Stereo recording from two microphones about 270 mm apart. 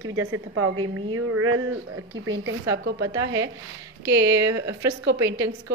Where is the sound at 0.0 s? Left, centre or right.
Right.